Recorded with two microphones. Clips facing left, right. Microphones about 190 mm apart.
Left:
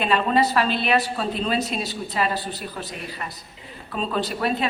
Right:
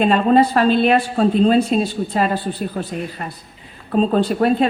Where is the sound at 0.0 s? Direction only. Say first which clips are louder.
Right 7 dB; 45° right (ahead or behind).